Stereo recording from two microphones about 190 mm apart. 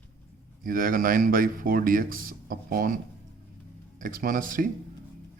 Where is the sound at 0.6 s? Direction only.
45° right (ahead or behind).